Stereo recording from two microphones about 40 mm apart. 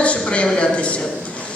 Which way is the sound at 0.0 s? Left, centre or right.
Left.